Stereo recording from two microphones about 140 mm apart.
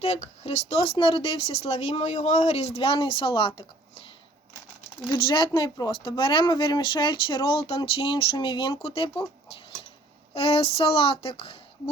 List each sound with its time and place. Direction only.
0.0 s speech: 50° left (ahead or behind)
5.0 s speech: 35° left (ahead or behind)
10.3 s speech: 45° left (ahead or behind)